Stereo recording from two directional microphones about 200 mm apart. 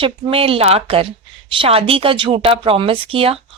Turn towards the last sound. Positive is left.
turn(degrees=-30)  # may be behind; listen again after turning